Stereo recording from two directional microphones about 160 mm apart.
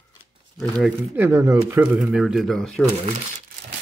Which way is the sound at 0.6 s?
Centre (ahead or behind).